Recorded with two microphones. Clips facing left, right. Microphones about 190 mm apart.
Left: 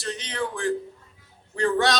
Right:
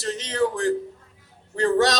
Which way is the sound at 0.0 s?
40° right (ahead or behind).